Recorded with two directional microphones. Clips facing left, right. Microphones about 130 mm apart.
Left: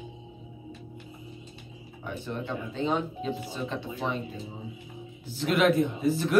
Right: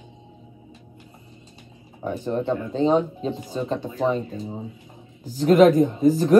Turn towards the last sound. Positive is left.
turn(degrees=-40)  # may be behind; listen again after turning